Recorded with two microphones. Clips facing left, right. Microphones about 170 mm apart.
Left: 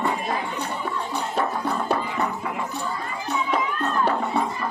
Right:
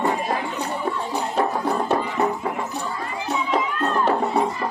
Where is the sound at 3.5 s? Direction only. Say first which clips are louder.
Right 3 dB; 35° right (ahead or behind).